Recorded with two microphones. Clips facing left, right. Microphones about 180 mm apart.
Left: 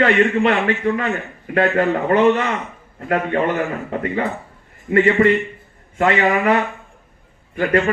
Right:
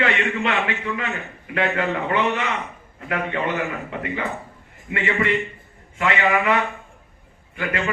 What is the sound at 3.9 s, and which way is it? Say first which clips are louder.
A man's voice: left 5 dB; 40° left (ahead or behind).